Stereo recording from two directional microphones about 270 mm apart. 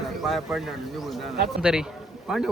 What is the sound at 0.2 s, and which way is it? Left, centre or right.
A man's voice, centre.